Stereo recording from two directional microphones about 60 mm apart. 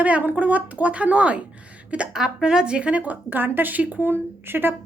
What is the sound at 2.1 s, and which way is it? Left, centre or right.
A woman's voice, centre.